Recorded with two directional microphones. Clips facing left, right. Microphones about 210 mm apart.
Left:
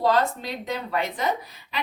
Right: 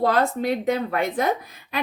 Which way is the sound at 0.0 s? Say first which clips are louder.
Right 2 dB; 55° right (ahead or behind).